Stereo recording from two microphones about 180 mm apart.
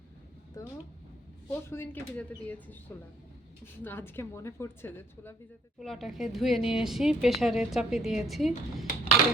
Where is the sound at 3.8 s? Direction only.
10° left (ahead or behind).